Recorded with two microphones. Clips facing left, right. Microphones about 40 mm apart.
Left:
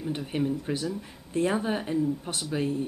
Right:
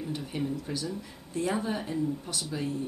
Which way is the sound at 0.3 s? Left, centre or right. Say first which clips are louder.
Left 5 dB; left.